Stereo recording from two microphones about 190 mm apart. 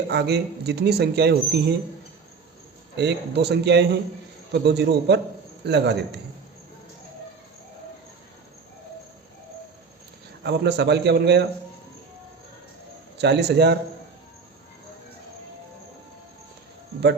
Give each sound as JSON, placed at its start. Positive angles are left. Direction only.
{"t": 0.1, "sound": "speech", "side_deg": -60}
{"t": 2.9, "sound": "speech", "side_deg": -65}
{"t": 10.4, "sound": "speech", "side_deg": -60}
{"t": 13.1, "sound": "speech", "side_deg": -60}